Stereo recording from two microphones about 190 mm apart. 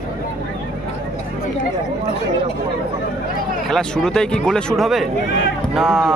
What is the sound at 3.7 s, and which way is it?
Speech, 5° left (ahead or behind).